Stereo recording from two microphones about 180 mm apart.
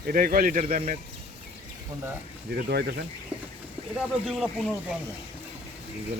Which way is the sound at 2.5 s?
60° right (ahead or behind).